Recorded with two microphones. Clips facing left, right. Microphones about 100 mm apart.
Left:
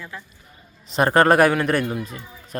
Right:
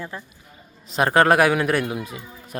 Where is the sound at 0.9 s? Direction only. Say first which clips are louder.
Left 1 dB; centre (ahead or behind).